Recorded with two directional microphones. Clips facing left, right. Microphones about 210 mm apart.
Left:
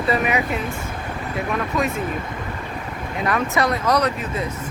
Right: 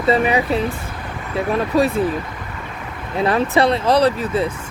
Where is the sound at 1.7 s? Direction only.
35° right (ahead or behind).